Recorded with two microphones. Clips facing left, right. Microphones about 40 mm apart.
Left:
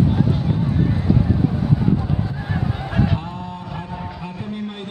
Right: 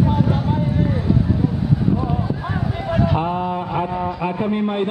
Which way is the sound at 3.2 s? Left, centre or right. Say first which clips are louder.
Right 10 dB; right.